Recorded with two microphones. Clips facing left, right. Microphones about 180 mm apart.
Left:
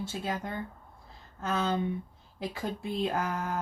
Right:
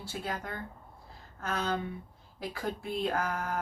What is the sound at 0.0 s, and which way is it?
Mantra, 20° left (ahead or behind).